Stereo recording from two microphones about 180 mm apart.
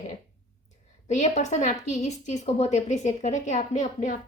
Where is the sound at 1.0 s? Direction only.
40° left (ahead or behind).